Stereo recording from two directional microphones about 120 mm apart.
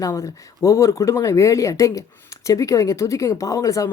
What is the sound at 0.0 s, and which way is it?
Speech, 25° left (ahead or behind).